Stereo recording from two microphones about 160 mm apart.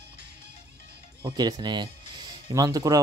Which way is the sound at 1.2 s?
25° right (ahead or behind).